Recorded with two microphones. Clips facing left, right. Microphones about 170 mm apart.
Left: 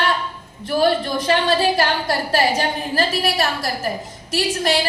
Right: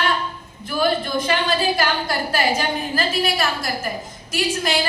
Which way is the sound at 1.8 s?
35° left (ahead or behind).